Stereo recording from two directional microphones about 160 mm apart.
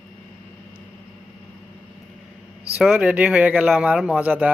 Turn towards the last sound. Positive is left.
turn(degrees=-10)  # may be behind; listen again after turning